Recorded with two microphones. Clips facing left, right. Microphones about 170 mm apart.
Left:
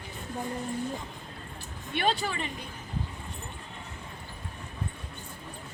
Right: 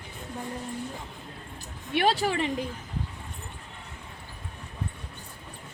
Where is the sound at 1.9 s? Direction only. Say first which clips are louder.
Right 4 dB; 70° right (ahead or behind); by 2.7 s 90° right.